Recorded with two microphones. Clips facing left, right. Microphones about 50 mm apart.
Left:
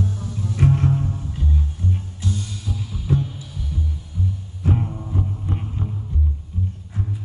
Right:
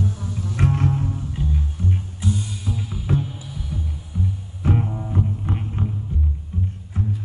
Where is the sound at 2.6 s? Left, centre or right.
Right.